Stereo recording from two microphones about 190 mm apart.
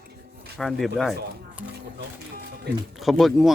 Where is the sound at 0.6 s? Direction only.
Centre (ahead or behind).